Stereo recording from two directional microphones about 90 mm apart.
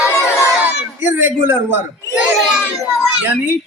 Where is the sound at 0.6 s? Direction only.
20° right (ahead or behind).